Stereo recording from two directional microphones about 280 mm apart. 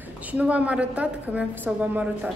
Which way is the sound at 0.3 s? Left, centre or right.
Centre.